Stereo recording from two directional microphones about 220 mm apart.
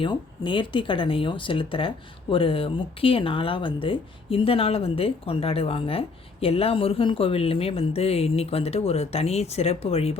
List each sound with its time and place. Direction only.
0.0 s speech: 20° left (ahead or behind)